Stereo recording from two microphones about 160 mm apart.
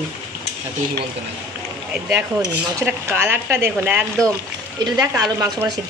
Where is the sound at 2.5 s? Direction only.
10° right (ahead or behind).